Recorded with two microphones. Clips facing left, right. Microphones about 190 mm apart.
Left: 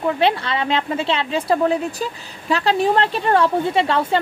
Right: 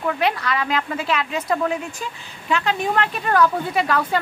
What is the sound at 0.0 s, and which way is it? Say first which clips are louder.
A woman's voice: left 3 dB; 30° left (ahead or behind).